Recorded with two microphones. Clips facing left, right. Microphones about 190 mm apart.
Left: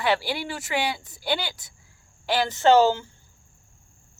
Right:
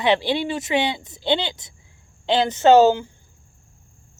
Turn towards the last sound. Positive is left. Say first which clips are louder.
# right 4 dB
turn(degrees=-15)  # may be behind; listen again after turning